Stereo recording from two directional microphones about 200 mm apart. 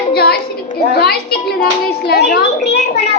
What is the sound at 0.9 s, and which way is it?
A child's voice, 55° left (ahead or behind).